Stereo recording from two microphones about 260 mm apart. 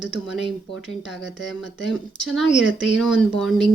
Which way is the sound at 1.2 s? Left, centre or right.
Left.